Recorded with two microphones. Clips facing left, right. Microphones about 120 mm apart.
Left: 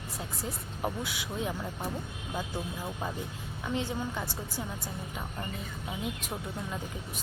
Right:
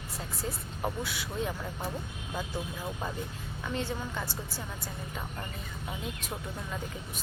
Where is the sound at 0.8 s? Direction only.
15° left (ahead or behind).